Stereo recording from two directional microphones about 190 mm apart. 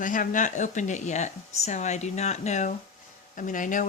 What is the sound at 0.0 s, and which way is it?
Speech, 45° left (ahead or behind).